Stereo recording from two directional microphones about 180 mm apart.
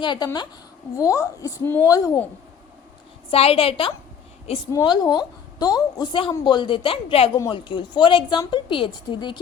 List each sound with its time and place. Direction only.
0.0 s a woman's voice: 25° left (ahead or behind)
3.2 s a woman's voice: 30° left (ahead or behind)